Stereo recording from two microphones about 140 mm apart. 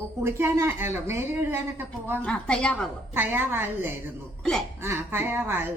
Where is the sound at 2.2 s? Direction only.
10° left (ahead or behind).